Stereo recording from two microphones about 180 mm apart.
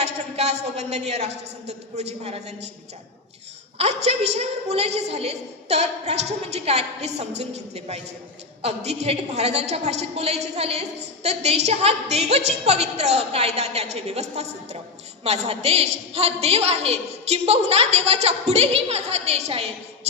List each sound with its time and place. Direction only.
0.0 s a woman's voice: 35° right (ahead or behind)
3.8 s a woman's voice: 35° right (ahead or behind)